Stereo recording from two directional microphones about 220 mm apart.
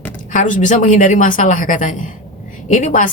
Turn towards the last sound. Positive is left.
turn(degrees=35)  # may be behind; listen again after turning